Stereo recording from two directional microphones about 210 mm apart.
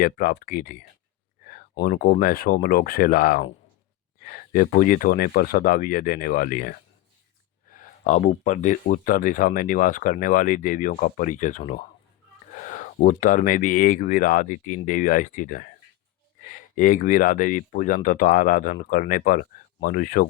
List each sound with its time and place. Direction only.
0.0 s speech: 40° left (ahead or behind)
2.0 s speech: 45° left (ahead or behind)